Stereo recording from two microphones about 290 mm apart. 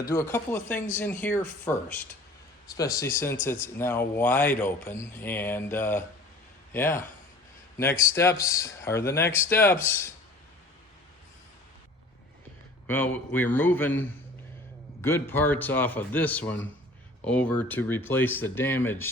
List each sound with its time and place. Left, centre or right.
0.0 s speech: centre
12.9 s speech: centre